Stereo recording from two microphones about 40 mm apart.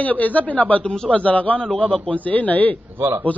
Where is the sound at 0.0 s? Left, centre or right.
Left.